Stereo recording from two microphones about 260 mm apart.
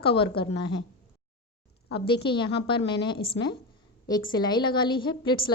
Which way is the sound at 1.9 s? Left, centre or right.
Centre.